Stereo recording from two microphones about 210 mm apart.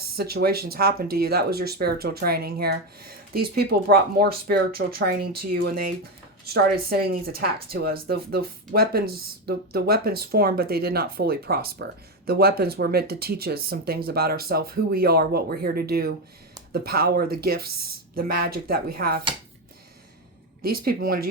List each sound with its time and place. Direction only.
0.2 s speech: 45° right (ahead or behind)
20.6 s speech: 45° right (ahead or behind)